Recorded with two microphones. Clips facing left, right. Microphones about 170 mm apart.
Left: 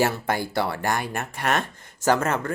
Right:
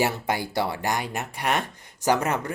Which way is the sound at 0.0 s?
15° right (ahead or behind).